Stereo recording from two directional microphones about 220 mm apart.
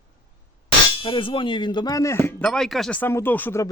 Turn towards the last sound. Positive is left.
turn(degrees=10)  # may be behind; listen again after turning